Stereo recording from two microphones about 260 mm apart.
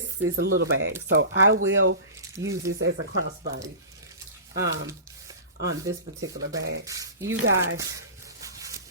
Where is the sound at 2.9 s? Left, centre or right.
Right.